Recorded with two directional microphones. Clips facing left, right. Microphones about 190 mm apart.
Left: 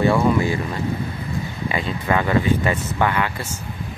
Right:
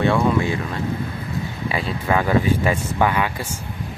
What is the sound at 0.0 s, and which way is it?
Speech, centre (ahead or behind).